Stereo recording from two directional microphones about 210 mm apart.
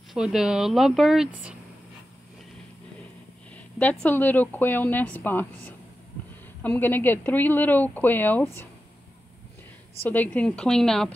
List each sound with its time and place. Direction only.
0.1 s speech: centre (ahead or behind)
3.7 s speech: 5° left (ahead or behind)
10.0 s speech: 10° left (ahead or behind)